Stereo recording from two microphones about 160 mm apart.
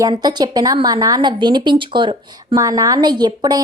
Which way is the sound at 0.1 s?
25° right (ahead or behind).